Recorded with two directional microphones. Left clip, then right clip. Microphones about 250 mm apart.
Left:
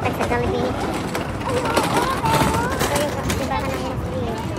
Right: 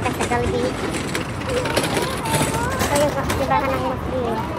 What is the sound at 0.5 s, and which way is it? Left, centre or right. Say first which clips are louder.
Vehicle: even; left.